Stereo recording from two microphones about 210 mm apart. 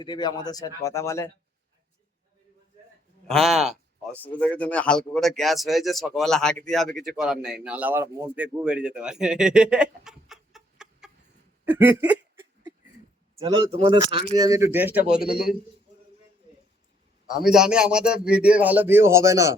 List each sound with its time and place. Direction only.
0.0 s speech: 20° left (ahead or behind)
3.2 s speech: centre (ahead or behind)
11.6 s a sound: 10° right (ahead or behind)
13.4 s speech: 25° right (ahead or behind); by 15.2 s 10° right (ahead or behind)
15.2 s a man's voice: 45° left (ahead or behind)
17.4 s speech: 5° right (ahead or behind)